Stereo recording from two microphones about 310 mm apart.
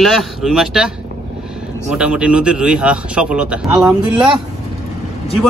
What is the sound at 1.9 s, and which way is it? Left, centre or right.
Speech, centre.